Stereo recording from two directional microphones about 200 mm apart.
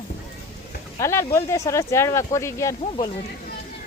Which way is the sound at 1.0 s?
15° left (ahead or behind).